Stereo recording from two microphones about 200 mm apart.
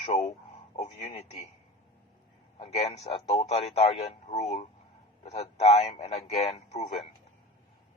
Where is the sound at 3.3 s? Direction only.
30° left (ahead or behind).